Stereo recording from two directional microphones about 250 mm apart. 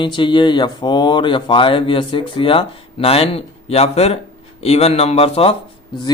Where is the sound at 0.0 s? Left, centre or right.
Centre.